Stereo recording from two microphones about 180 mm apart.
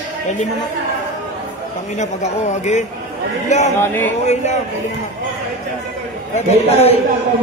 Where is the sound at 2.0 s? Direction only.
40° left (ahead or behind).